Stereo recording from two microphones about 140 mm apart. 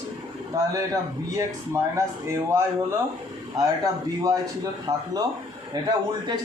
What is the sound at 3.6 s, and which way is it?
A man's voice, 25° right (ahead or behind).